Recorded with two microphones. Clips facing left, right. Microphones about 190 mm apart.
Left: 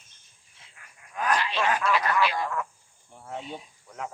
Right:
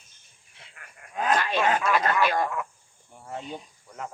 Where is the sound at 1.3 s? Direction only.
50° right (ahead or behind).